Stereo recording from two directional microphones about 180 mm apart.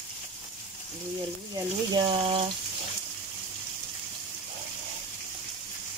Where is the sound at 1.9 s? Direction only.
30° right (ahead or behind).